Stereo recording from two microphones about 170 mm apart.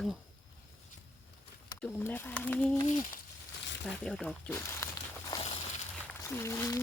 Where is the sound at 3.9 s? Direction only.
5° left (ahead or behind).